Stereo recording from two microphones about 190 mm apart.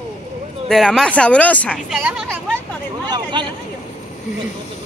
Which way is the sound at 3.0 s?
20° right (ahead or behind).